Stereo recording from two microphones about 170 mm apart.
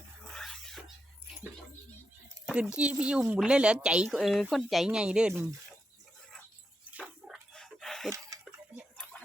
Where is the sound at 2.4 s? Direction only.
5° right (ahead or behind).